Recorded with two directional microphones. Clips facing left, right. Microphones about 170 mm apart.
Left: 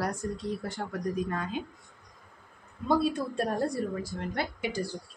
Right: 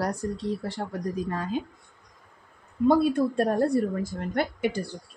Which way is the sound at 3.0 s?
55° right (ahead or behind).